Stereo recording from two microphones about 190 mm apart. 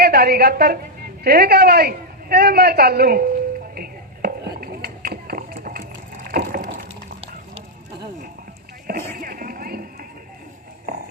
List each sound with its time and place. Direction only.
0.0 s a woman's voice: 55° right (ahead or behind)
3.8 s a sound: 50° right (ahead or behind)
6.2 s water: 50° right (ahead or behind); by 7.6 s 30° right (ahead or behind)
9.1 s music: 50° right (ahead or behind)